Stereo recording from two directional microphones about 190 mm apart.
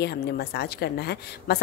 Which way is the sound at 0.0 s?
55° left (ahead or behind).